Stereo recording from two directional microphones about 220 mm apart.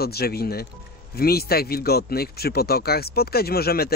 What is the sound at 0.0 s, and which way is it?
Speech, 45° left (ahead or behind).